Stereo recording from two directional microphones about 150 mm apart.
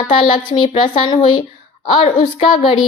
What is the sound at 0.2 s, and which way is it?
A woman's voice, 35° left (ahead or behind).